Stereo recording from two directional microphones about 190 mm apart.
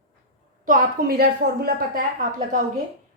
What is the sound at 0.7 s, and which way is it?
A woman's voice, 50° right (ahead or behind).